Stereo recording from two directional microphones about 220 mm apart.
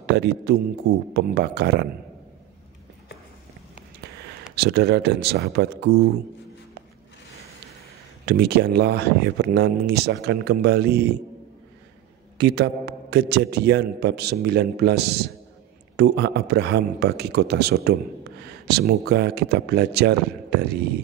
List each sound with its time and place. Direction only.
0.0 s speech: 50° right (ahead or behind)
4.6 s speech: 45° right (ahead or behind)
8.3 s speech: 50° right (ahead or behind)
12.4 s speech: 50° right (ahead or behind)